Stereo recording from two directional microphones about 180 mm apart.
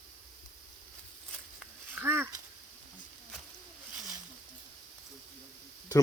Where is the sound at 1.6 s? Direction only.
10° right (ahead or behind).